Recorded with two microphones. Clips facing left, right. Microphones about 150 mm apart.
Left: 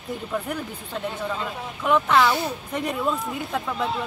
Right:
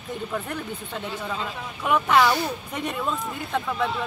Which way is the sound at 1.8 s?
5° right (ahead or behind).